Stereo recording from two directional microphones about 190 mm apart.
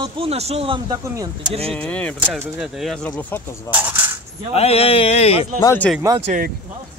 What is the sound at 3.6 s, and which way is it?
Speech, 10° right (ahead or behind).